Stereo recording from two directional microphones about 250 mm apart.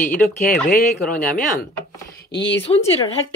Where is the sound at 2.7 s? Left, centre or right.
Left.